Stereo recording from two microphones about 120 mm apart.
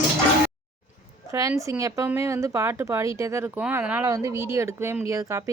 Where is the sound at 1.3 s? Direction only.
25° right (ahead or behind).